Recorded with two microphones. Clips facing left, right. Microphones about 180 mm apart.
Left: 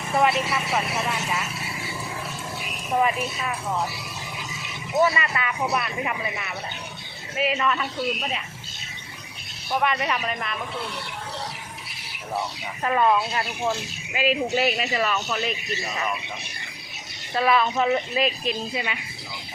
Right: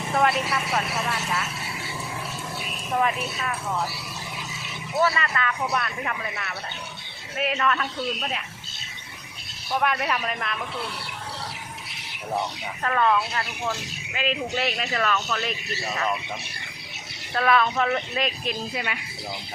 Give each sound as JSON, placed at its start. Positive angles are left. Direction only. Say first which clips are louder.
{"t": 0.1, "sound": "speech", "louder": "left 1 dB", "side_deg": 5}
{"t": 0.9, "sound": "speech", "louder": "left 1 dB", "side_deg": 15}
{"t": 2.9, "sound": "speech", "louder": "left 2 dB", "side_deg": 5}
{"t": 4.9, "sound": "speech", "louder": "left 2 dB", "side_deg": 15}
{"t": 9.8, "sound": "speech", "louder": "even", "side_deg": 0}
{"t": 12.8, "sound": "speech", "louder": "left 2 dB", "side_deg": 15}
{"t": 17.3, "sound": "speech", "louder": "left 1 dB", "side_deg": 5}